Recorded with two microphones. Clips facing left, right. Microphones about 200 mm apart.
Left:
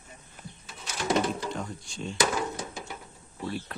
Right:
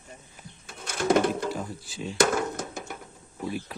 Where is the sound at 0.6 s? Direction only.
55° right (ahead or behind).